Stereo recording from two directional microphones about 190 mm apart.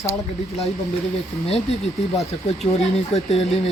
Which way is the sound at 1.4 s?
30° left (ahead or behind).